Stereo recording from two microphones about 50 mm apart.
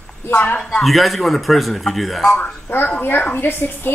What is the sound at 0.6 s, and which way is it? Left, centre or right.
Speech, centre.